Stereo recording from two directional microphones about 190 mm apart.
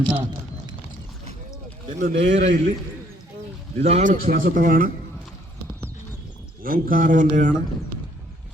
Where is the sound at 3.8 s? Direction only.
40° right (ahead or behind).